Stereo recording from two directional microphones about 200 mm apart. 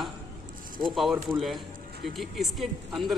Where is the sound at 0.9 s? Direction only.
Centre (ahead or behind).